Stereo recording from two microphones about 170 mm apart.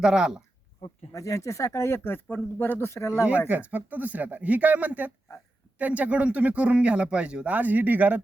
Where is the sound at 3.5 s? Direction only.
10° right (ahead or behind).